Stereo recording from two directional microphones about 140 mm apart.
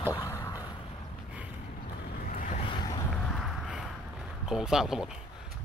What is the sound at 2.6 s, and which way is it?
Boat, 30° left (ahead or behind).